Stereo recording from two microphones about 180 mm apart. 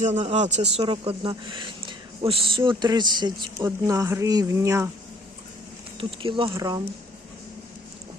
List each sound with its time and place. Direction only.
0.0 s speech: 40° right (ahead or behind); by 4.9 s 15° right (ahead or behind)
6.0 s speech: 30° right (ahead or behind)